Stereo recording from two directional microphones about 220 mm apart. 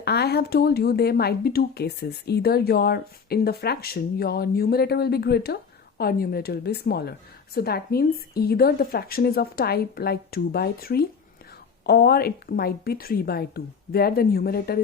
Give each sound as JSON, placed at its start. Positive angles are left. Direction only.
{"t": 0.0, "sound": "speech", "side_deg": 50}